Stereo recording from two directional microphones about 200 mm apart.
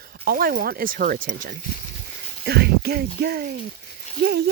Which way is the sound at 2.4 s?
55° right (ahead or behind).